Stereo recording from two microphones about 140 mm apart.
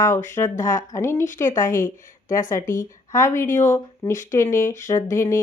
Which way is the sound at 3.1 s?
20° left (ahead or behind).